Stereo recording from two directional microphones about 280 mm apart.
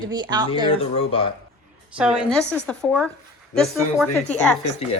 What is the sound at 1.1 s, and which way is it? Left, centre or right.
Speech, centre.